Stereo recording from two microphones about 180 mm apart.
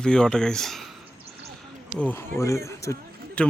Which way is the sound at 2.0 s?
10° left (ahead or behind).